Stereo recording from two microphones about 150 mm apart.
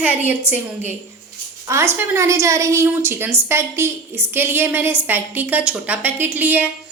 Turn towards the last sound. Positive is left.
turn(degrees=-15)  # may be behind; listen again after turning